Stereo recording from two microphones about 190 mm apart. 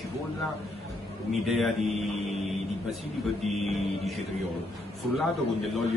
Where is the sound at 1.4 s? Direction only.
Centre (ahead or behind).